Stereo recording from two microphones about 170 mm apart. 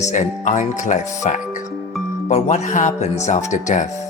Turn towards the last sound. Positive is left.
turn(degrees=45)  # may be behind; listen again after turning